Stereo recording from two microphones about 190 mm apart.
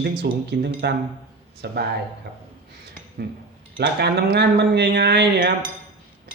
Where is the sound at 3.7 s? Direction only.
55° right (ahead or behind).